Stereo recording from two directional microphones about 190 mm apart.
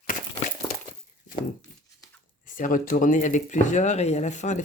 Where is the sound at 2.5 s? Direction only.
45° left (ahead or behind).